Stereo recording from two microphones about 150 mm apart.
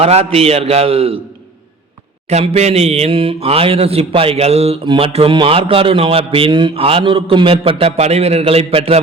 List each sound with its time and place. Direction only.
0.0 s speech: 45° right (ahead or behind)
2.3 s speech: 45° right (ahead or behind)